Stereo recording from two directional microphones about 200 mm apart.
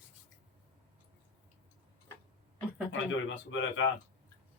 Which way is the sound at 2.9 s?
70° left (ahead or behind).